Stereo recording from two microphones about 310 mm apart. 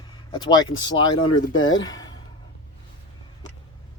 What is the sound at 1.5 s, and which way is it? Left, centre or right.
Speech, left.